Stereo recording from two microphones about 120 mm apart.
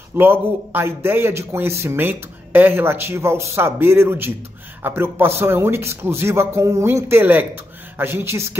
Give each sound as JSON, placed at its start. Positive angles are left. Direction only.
{"t": 0.1, "sound": "a man's voice", "side_deg": -15}